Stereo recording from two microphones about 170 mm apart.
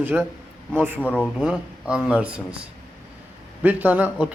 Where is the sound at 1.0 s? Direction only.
10° left (ahead or behind).